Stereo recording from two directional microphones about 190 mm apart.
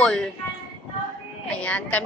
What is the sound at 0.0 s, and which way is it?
Speech, 5° left (ahead or behind).